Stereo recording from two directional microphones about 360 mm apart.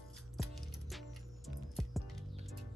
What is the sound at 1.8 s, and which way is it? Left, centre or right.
Music, centre.